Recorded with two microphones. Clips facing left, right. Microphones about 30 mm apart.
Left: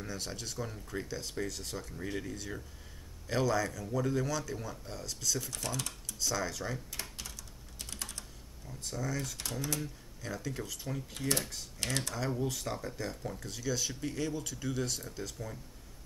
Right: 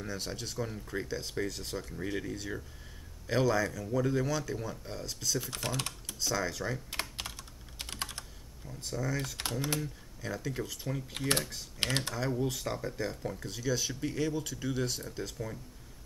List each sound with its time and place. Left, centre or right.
0.0 s speech: centre
5.4 s speech: right
6.1 s speech: centre
6.9 s computer keyboard: right
8.6 s speech: centre
9.4 s speech: right
10.2 s speech: centre
11.1 s speech: right
12.1 s speech: centre